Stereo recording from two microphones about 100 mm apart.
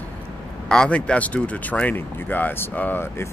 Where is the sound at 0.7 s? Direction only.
10° left (ahead or behind).